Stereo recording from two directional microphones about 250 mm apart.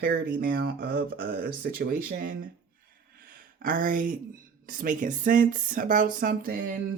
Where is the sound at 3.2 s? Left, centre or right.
Right.